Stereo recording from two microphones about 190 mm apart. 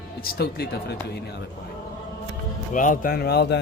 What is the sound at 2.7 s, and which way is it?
Speech, 40° left (ahead or behind).